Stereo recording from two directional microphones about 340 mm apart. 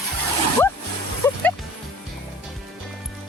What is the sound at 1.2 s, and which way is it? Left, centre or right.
Music, centre.